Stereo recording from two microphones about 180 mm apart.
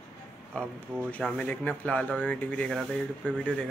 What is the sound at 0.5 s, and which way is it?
Speech, 5° left (ahead or behind).